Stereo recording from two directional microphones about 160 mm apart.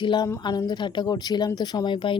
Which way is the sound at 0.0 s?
30° left (ahead or behind).